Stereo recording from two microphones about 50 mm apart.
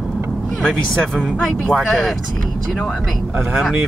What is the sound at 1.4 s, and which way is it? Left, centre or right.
Speech, centre.